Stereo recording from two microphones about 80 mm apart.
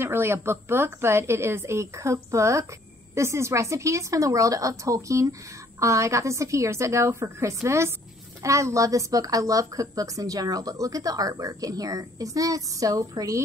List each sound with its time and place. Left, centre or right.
0.0 s a woman's voice: right